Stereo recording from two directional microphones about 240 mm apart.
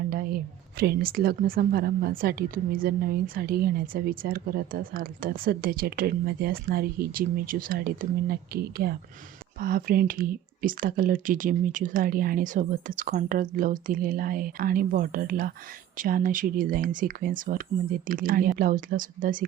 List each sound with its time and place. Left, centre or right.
0.1 s a woman's voice: right